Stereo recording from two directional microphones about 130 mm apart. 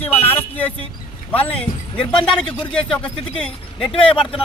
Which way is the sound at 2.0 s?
40° left (ahead or behind).